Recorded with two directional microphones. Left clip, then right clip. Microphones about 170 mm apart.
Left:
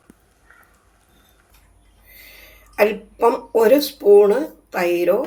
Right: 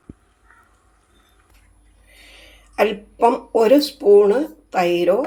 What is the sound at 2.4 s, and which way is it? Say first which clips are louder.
Speech: left 1 dB; 15° right (ahead or behind).